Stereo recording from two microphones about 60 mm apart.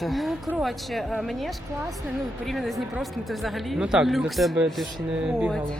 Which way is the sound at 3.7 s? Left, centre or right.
Centre.